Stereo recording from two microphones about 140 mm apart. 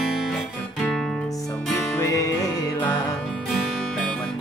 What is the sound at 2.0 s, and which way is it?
Music, 25° left (ahead or behind).